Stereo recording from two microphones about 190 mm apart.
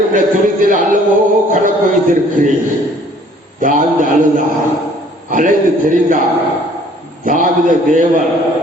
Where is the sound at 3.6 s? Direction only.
45° right (ahead or behind).